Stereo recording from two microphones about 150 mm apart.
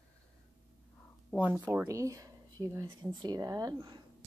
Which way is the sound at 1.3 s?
10° right (ahead or behind).